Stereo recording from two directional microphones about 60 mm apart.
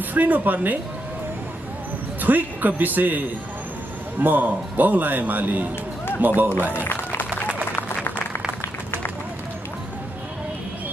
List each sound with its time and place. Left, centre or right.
0.1 s a man's voice: right
2.2 s a man's voice: right
4.2 s a man's voice: right
6.7 s music: left